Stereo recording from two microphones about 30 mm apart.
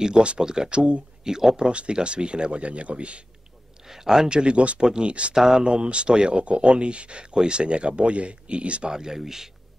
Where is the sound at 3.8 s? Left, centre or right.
Centre.